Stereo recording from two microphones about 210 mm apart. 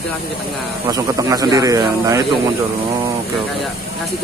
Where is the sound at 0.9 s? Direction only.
15° right (ahead or behind).